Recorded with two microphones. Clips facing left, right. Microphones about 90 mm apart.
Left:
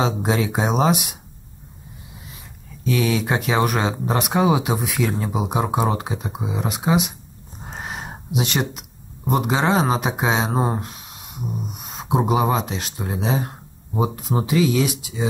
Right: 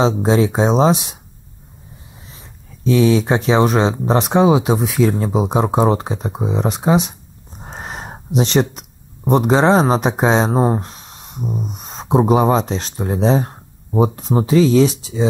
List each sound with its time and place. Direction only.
0.0 s speech: 25° right (ahead or behind)
2.8 s speech: 25° right (ahead or behind)
7.7 s a sound: 35° right (ahead or behind)
8.4 s speech: 30° right (ahead or behind)